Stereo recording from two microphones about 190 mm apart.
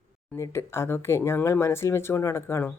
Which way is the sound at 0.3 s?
15° left (ahead or behind).